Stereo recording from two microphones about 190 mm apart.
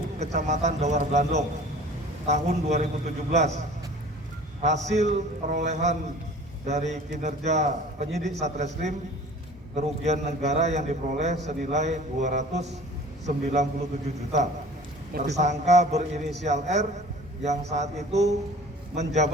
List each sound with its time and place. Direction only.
0.2 s a man's voice: 35° right (ahead or behind)
4.6 s a man's voice: 35° right (ahead or behind)
15.1 s a man's voice: 50° right (ahead or behind)
15.4 s a man's voice: 35° right (ahead or behind)